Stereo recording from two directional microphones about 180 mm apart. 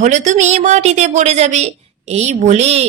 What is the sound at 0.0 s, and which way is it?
A woman's voice, 45° right (ahead or behind).